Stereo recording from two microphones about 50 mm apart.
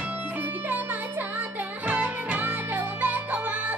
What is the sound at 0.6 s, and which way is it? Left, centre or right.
Music, right.